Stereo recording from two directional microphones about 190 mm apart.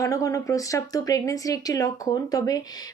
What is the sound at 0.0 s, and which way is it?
Speech, 15° left (ahead or behind).